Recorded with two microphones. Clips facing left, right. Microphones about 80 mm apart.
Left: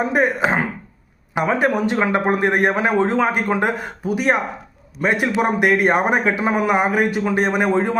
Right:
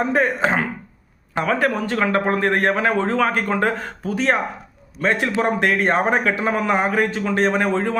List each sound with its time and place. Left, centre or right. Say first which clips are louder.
0.0 s a man's voice: left 1 dB; centre